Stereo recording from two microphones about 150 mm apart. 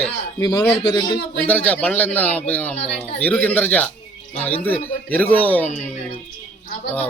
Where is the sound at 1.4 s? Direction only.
10° left (ahead or behind).